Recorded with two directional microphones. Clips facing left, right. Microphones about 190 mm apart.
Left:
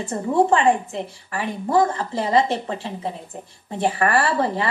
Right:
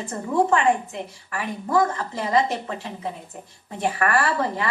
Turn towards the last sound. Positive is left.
turn(degrees=30)  # may be behind; listen again after turning